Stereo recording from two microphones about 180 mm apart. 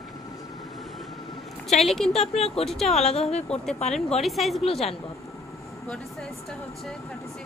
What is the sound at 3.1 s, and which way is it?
Speech, 35° left (ahead or behind).